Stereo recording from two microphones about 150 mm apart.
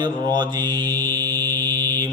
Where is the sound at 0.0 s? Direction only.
30° right (ahead or behind).